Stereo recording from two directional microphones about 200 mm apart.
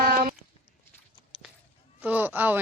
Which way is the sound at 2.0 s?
10° right (ahead or behind).